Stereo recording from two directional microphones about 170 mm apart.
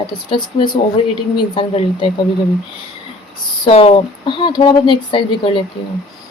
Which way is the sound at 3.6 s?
35° left (ahead or behind).